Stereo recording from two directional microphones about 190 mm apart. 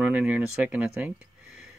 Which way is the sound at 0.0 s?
5° right (ahead or behind).